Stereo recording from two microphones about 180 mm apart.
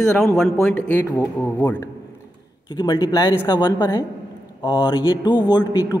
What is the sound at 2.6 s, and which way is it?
A man's voice, 20° left (ahead or behind).